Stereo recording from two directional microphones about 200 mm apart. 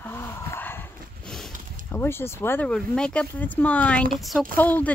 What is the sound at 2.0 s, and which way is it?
Speech, 10° left (ahead or behind).